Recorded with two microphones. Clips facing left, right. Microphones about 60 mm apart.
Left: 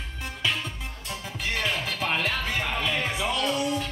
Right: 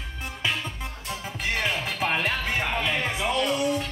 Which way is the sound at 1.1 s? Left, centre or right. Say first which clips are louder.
Right 2 dB; right.